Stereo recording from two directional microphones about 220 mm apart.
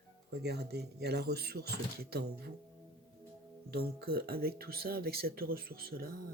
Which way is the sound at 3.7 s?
45° right (ahead or behind).